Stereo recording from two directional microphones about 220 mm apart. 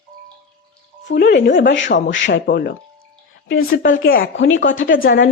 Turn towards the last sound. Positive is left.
turn(degrees=40)  # may be behind; listen again after turning